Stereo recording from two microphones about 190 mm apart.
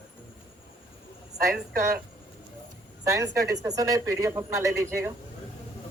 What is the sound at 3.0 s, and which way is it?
Speech, 15° right (ahead or behind).